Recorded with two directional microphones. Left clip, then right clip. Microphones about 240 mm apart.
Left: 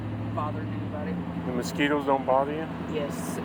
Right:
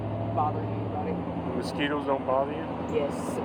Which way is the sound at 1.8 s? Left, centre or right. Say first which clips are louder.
Left 4 dB; left.